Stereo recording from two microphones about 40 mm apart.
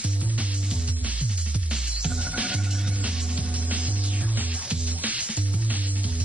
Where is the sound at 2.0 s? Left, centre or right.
Right.